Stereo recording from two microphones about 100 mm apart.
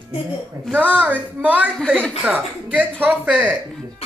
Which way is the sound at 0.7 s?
15° right (ahead or behind).